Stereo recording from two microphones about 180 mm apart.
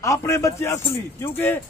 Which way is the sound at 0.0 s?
15° left (ahead or behind).